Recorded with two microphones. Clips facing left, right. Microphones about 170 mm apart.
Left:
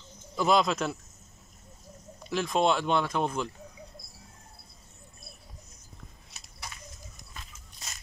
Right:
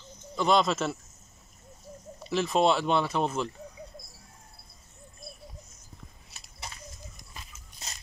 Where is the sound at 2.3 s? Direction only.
Centre (ahead or behind).